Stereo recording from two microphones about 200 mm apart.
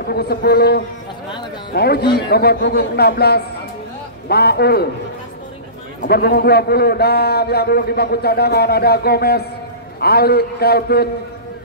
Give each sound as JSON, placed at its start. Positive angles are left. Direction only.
{"t": 0.0, "sound": "a man's voice", "side_deg": 50}
{"t": 6.0, "sound": "a man's voice", "side_deg": 50}